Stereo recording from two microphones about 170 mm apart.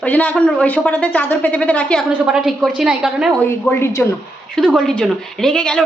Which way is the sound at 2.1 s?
5° right (ahead or behind).